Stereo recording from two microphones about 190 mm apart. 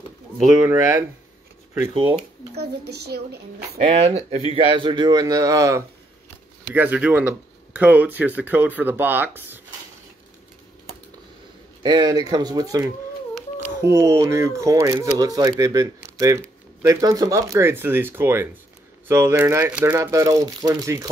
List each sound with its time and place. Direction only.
0.5 s speech: 10° right (ahead or behind)
2.5 s a woman's voice: 60° right (ahead or behind)
3.8 s speech: 35° right (ahead or behind); by 9.6 s 10° right (ahead or behind)
11.8 s speech: 20° right (ahead or behind)